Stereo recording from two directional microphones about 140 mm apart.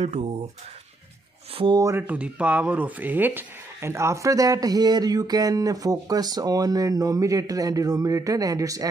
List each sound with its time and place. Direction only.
0.0 s speech: 50° right (ahead or behind)
1.8 s speech: 20° right (ahead or behind)